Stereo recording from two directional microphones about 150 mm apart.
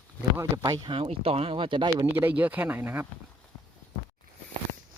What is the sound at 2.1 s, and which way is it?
Speech, 10° right (ahead or behind).